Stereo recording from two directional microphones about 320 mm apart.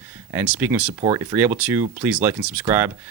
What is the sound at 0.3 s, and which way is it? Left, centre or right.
Speech, centre.